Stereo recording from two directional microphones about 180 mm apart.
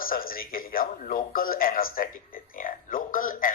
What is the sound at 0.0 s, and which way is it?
A man's voice, 55° left (ahead or behind).